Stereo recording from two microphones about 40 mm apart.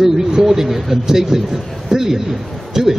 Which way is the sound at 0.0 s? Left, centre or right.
Centre.